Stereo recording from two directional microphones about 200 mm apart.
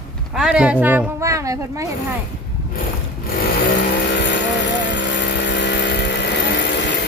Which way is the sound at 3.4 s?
55° left (ahead or behind).